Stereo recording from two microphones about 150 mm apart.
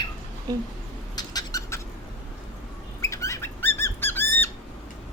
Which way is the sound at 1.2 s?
25° left (ahead or behind).